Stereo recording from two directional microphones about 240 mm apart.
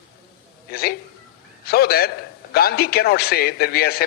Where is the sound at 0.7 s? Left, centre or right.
Left.